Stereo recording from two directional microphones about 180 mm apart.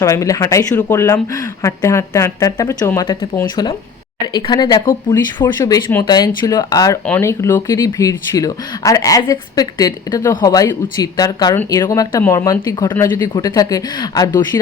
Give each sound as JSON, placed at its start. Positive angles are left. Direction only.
{"t": 0.0, "sound": "speech", "side_deg": 15}